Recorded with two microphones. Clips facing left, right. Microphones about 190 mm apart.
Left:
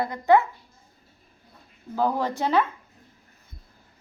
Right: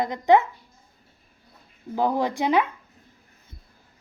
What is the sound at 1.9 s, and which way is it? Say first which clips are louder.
Speech: right 1 dB; 15° right (ahead or behind).